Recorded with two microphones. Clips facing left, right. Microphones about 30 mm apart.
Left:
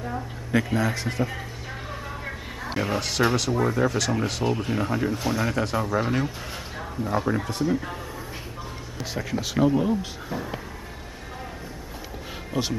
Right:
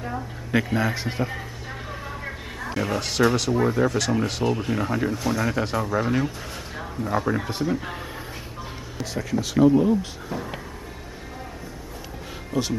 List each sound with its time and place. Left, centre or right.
0.0 s a man's voice: centre
1.2 s a sound: centre
3.0 s speech: centre
5.5 s speech: centre
5.8 s speech: centre
9.0 s speech: centre
12.5 s speech: left